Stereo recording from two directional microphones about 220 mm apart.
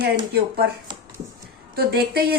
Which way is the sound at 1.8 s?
45° right (ahead or behind).